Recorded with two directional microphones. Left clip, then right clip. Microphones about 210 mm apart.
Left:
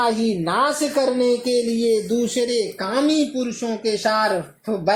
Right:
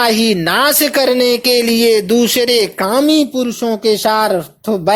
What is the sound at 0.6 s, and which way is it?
Speech, 20° right (ahead or behind).